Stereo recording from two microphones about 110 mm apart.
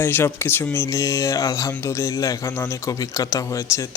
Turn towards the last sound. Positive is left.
turn(degrees=25)  # may be behind; listen again after turning